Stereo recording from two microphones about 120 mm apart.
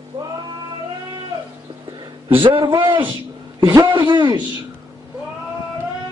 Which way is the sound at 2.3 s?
45° right (ahead or behind).